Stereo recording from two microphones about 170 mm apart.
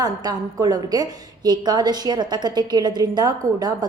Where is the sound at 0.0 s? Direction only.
25° right (ahead or behind).